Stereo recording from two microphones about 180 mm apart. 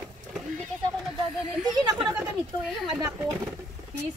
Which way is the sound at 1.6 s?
25° right (ahead or behind).